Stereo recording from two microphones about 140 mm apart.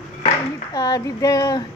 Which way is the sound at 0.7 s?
25° left (ahead or behind).